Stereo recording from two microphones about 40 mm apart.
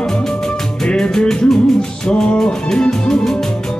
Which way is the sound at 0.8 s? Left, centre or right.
Centre.